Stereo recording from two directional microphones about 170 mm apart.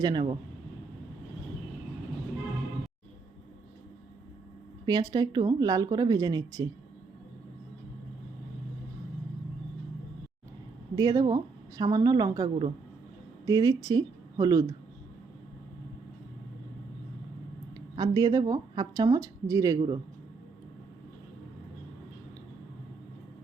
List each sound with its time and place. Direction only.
0.0 s speech: 25° right (ahead or behind)
4.9 s speech: 25° right (ahead or behind)
10.9 s speech: 20° right (ahead or behind)
17.9 s speech: 25° right (ahead or behind)